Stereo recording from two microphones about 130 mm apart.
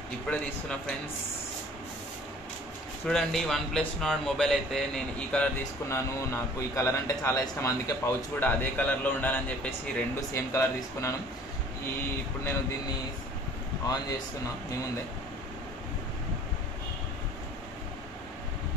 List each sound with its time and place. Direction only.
0.3 s a man's voice: 5° left (ahead or behind)
3.1 s a man's voice: 5° left (ahead or behind)
5.9 s speech: 20° left (ahead or behind)